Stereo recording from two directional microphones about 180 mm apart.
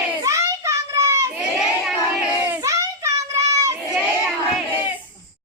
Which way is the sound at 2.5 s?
15° right (ahead or behind).